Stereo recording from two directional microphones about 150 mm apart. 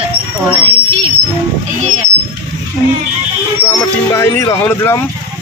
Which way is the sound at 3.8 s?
20° left (ahead or behind).